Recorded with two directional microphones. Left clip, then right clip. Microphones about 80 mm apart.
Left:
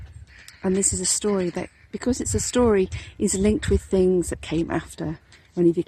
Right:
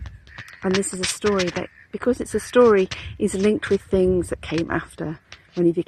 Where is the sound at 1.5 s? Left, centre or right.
Left.